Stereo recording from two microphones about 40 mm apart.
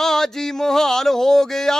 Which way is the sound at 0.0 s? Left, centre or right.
Centre.